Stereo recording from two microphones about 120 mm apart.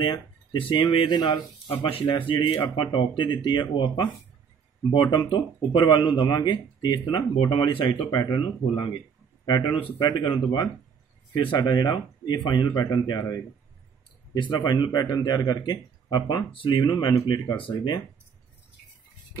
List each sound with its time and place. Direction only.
0.0 s a man's voice: 45° left (ahead or behind)
14.3 s a man's voice: 35° left (ahead or behind)